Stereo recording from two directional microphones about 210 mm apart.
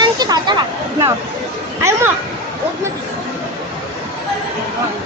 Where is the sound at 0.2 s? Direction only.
20° right (ahead or behind).